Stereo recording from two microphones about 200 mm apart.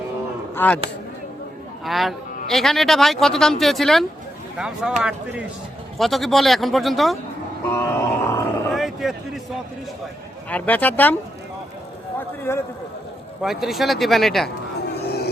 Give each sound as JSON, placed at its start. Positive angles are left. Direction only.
{"t": 0.5, "sound": "speech", "side_deg": 10}
{"t": 1.8, "sound": "a man's voice", "side_deg": 0}
{"t": 7.7, "sound": "grunt", "side_deg": 15}
{"t": 8.7, "sound": "a sound", "side_deg": 0}
{"t": 10.5, "sound": "speech", "side_deg": 10}
{"t": 12.4, "sound": "speech", "side_deg": 10}
{"t": 13.4, "sound": "a man's voice", "side_deg": 0}
{"t": 15.0, "sound": "music", "side_deg": 55}